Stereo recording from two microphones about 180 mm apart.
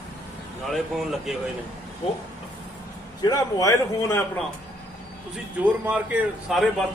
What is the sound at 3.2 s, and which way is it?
A man's voice, 20° left (ahead or behind).